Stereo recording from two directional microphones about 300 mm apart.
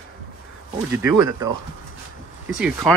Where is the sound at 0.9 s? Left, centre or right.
Centre.